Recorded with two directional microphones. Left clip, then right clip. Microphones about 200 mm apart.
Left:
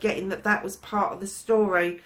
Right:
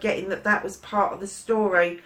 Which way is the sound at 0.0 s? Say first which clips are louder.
Right 1 dB; 45° left (ahead or behind).